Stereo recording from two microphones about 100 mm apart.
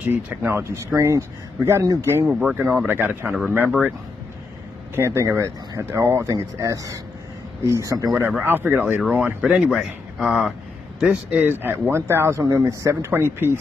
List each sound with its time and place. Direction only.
0.0 s a man's voice: 20° right (ahead or behind)
2.4 s a man's voice: 20° right (ahead or behind)
4.9 s a man's voice: 25° right (ahead or behind)
8.1 s a man's voice: 15° right (ahead or behind)
11.4 s a man's voice: 20° right (ahead or behind)